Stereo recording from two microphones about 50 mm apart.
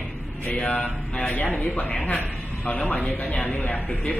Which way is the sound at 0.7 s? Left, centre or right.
Left.